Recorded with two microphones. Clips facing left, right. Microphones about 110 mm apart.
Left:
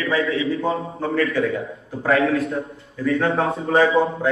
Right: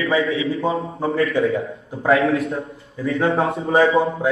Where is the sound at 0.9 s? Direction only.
25° right (ahead or behind).